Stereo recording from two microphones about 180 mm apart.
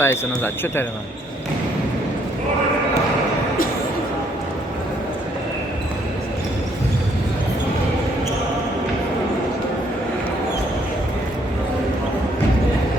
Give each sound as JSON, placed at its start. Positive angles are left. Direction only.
{"t": 0.0, "sound": "speech", "side_deg": 15}